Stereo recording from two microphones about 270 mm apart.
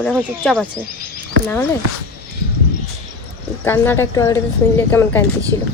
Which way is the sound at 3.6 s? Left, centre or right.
Centre.